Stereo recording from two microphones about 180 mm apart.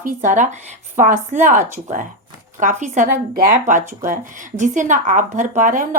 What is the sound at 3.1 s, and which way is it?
Speech, 60° right (ahead or behind).